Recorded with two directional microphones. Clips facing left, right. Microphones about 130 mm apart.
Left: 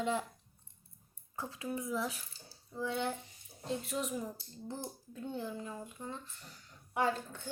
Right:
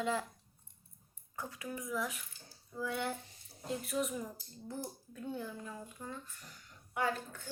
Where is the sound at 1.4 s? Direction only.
25° left (ahead or behind).